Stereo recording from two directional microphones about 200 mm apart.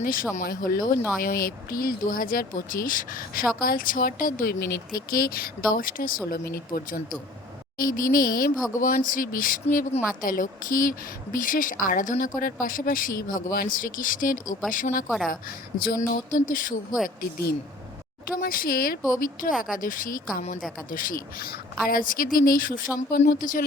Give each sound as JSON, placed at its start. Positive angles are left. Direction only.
{"t": 0.0, "sound": "speech", "side_deg": 45}
{"t": 15.0, "sound": "a woman's voice", "side_deg": 0}
{"t": 15.8, "sound": "speech", "side_deg": 45}
{"t": 18.3, "sound": "speech", "side_deg": 45}